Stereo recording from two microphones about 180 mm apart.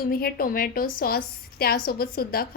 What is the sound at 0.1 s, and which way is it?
A woman's voice, 55° left (ahead or behind).